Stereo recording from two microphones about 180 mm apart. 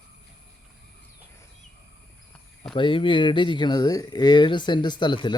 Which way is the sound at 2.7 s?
30° left (ahead or behind).